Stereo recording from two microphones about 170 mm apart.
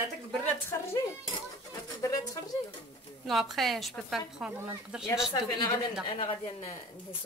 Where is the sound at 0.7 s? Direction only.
15° left (ahead or behind).